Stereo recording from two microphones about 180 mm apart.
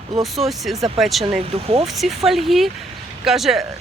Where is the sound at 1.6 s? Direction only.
35° right (ahead or behind).